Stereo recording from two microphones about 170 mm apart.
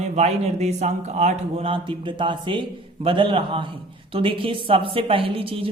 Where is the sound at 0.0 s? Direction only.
40° right (ahead or behind).